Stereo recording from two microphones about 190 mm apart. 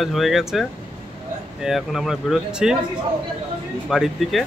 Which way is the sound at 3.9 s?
Centre (ahead or behind).